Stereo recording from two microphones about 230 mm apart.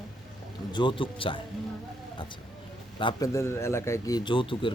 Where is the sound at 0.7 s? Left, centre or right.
Left.